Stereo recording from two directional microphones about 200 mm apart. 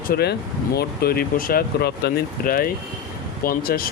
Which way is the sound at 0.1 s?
55° left (ahead or behind).